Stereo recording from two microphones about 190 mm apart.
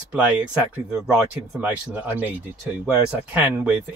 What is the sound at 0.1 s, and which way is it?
Speech, 10° right (ahead or behind).